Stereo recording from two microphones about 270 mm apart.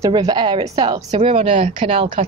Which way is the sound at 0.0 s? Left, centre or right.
Centre.